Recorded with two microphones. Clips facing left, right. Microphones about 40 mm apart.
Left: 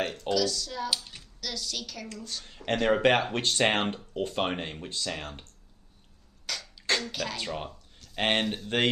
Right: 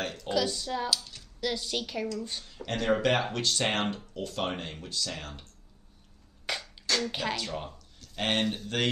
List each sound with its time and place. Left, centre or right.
0.0 s speech: left
0.3 s a woman's voice: right
0.8 s speech: centre
1.4 s a woman's voice: right
2.4 s speech: left
6.5 s beatboxing: right
7.1 s a woman's voice: right
7.3 s speech: left